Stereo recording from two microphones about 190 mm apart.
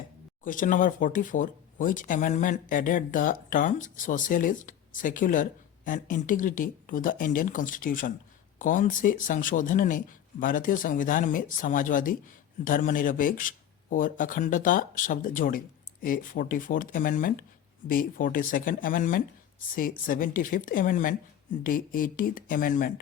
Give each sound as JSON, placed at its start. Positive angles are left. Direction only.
{"t": 0.4, "sound": "speech", "side_deg": 45}